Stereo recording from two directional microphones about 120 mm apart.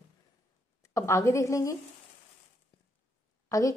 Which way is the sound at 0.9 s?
25° left (ahead or behind).